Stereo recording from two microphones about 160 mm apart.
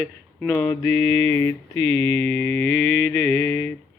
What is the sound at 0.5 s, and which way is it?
Mantra, 10° left (ahead or behind).